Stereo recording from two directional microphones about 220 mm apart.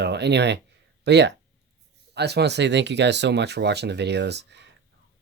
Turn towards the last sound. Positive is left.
turn(degrees=-50)  # may be behind; listen again after turning